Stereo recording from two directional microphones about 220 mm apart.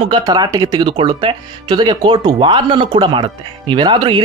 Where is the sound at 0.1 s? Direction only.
20° right (ahead or behind).